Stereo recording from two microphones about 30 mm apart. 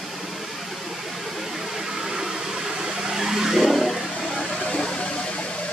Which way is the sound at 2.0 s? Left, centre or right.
Right.